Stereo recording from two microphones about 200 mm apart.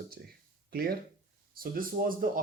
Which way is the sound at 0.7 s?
50° right (ahead or behind).